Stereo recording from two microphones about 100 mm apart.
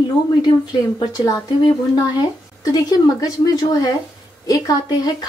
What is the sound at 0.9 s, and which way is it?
Speech, 40° left (ahead or behind).